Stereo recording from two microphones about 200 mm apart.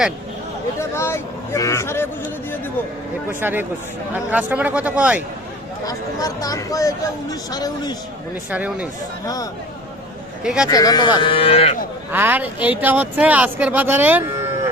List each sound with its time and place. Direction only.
0.8 s vehicle: 15° left (ahead or behind)
3.4 s speech: 10° right (ahead or behind)
5.8 s speech: 15° left (ahead or behind)
8.4 s speech: 5° right (ahead or behind)
9.2 s speech: 20° left (ahead or behind)
10.4 s speech: 5° right (ahead or behind)
10.7 s speech: 20° left (ahead or behind)
12.1 s speech: 10° right (ahead or behind)